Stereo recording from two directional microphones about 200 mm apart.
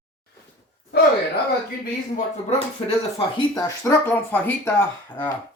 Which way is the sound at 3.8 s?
10° left (ahead or behind).